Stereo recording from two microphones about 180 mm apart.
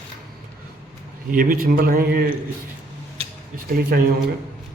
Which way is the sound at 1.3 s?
50° right (ahead or behind).